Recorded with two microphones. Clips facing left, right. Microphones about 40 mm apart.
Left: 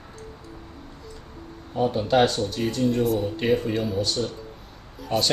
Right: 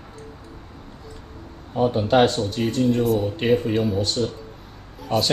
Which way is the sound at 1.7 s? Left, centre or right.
Right.